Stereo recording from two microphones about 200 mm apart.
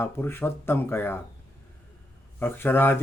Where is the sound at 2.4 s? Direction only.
10° left (ahead or behind).